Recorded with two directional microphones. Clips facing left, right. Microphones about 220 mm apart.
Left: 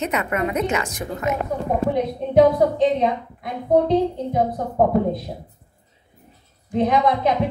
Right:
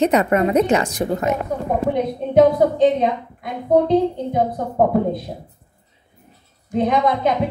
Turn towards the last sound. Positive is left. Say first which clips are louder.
# right 1 dB
turn(degrees=0)  # may be behind; listen again after turning